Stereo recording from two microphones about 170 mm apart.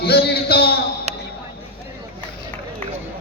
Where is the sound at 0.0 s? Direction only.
70° left (ahead or behind).